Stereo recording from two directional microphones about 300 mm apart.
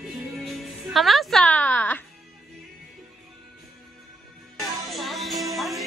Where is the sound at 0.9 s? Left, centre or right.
Centre.